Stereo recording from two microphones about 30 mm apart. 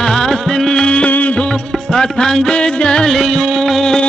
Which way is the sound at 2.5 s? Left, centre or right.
Left.